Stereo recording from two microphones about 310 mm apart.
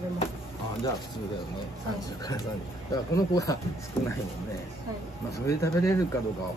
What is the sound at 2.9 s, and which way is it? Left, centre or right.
Speech, centre.